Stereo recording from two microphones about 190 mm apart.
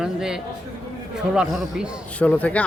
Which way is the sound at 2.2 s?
10° left (ahead or behind).